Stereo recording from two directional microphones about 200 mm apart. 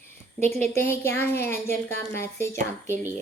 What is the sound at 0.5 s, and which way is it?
Speech, 35° right (ahead or behind).